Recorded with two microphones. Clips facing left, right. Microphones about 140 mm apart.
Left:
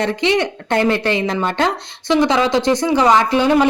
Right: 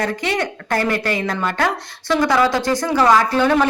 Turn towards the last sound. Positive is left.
turn(degrees=15)  # may be behind; listen again after turning